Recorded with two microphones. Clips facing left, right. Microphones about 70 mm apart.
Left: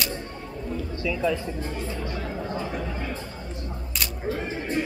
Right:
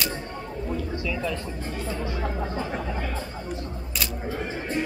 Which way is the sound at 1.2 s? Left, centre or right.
Centre.